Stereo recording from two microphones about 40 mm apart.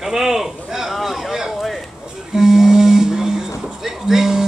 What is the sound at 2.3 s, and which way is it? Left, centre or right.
Humming, centre.